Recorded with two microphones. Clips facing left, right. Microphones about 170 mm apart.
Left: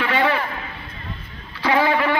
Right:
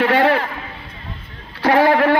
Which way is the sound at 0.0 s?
65° right (ahead or behind).